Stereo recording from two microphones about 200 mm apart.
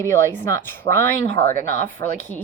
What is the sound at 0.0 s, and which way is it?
A woman's voice, 15° left (ahead or behind).